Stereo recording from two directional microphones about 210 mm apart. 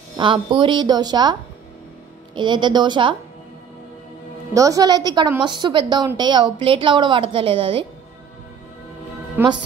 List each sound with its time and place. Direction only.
0.2 s a woman's voice: 25° right (ahead or behind)
2.3 s a woman's voice: 20° right (ahead or behind)
4.6 s a woman's voice: 15° right (ahead or behind)
9.4 s speech: 10° right (ahead or behind)